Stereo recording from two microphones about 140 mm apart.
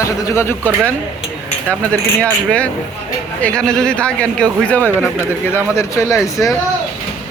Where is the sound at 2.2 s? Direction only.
10° left (ahead or behind).